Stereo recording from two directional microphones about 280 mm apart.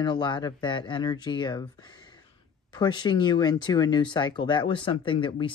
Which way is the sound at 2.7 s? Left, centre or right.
Centre.